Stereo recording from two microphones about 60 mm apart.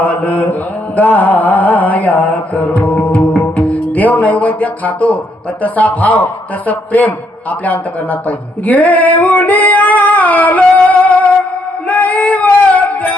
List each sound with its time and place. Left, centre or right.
0.0 s a man's voice: left
0.9 s mantra: left
5.6 s a man's voice: left
11.9 s music: left